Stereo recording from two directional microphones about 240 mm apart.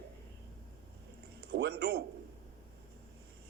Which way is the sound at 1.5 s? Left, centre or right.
Right.